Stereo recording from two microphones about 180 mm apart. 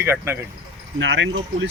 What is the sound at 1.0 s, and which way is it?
Speech, 90° right.